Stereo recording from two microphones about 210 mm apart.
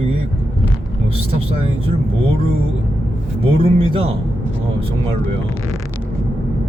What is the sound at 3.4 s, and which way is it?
Speech, 25° right (ahead or behind).